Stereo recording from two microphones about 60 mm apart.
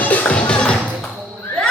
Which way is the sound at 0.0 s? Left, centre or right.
Left.